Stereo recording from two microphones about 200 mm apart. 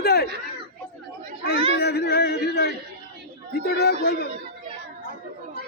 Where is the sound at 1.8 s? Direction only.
55° left (ahead or behind).